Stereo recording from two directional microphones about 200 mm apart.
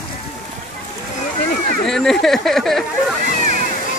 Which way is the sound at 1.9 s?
Centre (ahead or behind).